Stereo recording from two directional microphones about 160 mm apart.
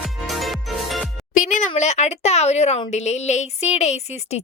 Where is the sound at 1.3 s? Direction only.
55° left (ahead or behind).